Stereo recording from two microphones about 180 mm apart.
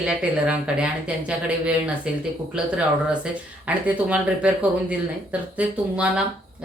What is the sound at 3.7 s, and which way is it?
Speech, 10° right (ahead or behind).